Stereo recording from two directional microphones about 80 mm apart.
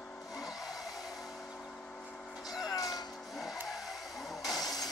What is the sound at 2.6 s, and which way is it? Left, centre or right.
Music, left.